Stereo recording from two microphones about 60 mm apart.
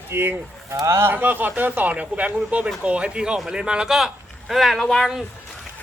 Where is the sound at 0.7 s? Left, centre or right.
Right.